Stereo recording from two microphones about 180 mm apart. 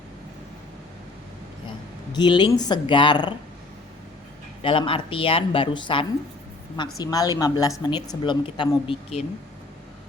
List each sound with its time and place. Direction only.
2.1 s a woman's voice: 25° left (ahead or behind)
4.6 s a woman's voice: 30° left (ahead or behind)